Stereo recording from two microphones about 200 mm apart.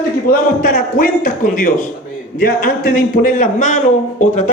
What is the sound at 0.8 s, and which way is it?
A man's voice, 45° left (ahead or behind).